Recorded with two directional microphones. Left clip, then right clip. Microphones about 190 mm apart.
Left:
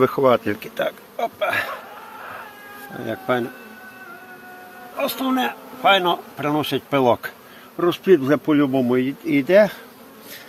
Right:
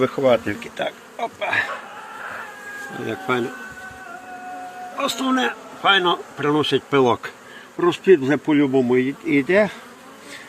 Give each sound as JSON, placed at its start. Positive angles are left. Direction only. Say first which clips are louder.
{"t": 0.0, "sound": "speech", "louder": "left 1 dB", "side_deg": 25}
{"t": 3.1, "sound": "speech", "louder": "left 1 dB", "side_deg": 10}
{"t": 4.9, "sound": "speech", "louder": "right 1 dB", "side_deg": 10}